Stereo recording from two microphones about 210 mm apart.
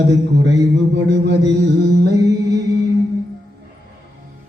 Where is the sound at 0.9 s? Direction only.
55° right (ahead or behind).